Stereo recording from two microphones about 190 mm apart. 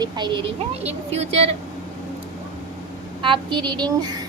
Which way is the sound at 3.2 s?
25° right (ahead or behind).